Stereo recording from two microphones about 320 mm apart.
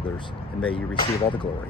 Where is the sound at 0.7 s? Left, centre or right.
Centre.